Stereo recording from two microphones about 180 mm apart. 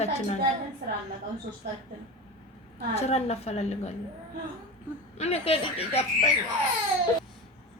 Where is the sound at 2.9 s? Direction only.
35° left (ahead or behind).